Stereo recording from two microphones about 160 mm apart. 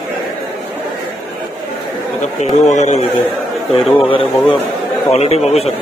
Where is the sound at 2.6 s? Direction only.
45° left (ahead or behind).